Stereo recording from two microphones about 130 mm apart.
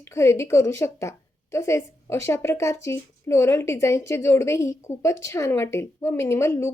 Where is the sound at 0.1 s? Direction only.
20° left (ahead or behind).